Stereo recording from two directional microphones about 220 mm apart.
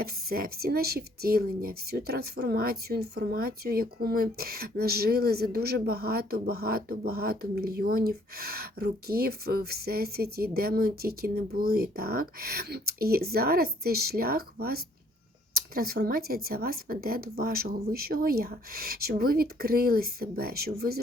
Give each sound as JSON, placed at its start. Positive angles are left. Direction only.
{"t": 0.0, "sound": "a woman's voice", "side_deg": -45}